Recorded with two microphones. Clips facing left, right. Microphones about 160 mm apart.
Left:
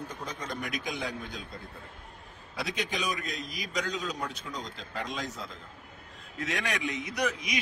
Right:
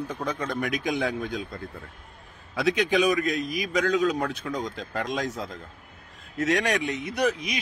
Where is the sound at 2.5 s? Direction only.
65° right (ahead or behind).